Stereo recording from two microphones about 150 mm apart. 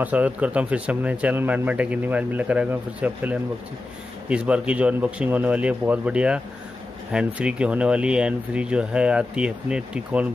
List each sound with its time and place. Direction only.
0.0 s speech: 10° right (ahead or behind)